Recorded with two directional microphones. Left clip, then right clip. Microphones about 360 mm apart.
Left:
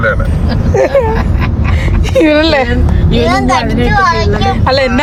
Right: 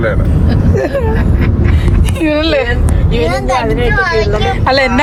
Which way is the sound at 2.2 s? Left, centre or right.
Centre.